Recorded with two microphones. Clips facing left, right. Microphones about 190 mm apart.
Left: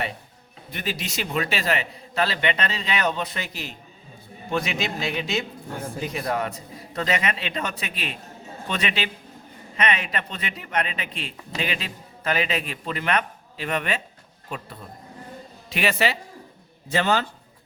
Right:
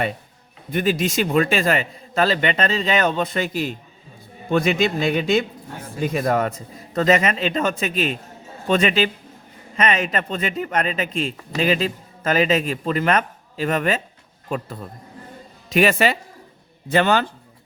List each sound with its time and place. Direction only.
0.7 s speech: 50° right (ahead or behind)
15.7 s speech: 50° right (ahead or behind)
16.9 s speech: 60° right (ahead or behind)